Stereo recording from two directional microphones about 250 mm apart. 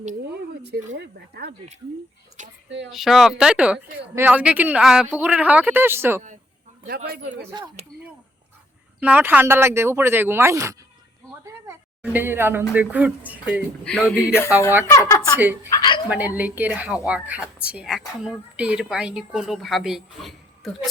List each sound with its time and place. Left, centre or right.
0.9 s speech: right
2.6 s speech: right
2.9 s a woman's voice: centre
6.8 s speech: right
7.4 s speech: centre
9.0 s a woman's voice: centre
14.3 s a woman's voice: centre
15.4 s speech: centre
15.7 s a woman's voice: centre
16.0 s a woman's voice: centre